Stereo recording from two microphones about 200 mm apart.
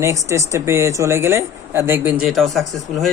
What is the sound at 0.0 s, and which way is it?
Speech, 15° right (ahead or behind).